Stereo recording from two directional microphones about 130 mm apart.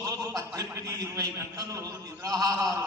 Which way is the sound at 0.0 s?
25° right (ahead or behind).